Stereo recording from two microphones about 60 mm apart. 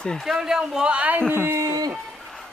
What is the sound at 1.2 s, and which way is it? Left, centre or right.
Speech, right.